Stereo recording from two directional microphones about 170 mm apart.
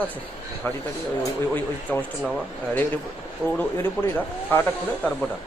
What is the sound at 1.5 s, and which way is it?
Speech, 10° left (ahead or behind).